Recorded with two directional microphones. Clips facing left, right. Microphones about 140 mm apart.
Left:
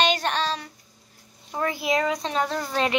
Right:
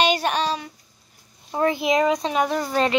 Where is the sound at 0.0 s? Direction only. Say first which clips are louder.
Right 3 dB; 10° right (ahead or behind).